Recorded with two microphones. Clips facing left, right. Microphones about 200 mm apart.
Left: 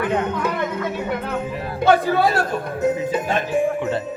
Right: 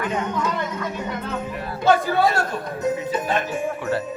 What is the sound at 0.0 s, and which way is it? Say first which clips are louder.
Speech: left 3 dB; 60° left (ahead or behind).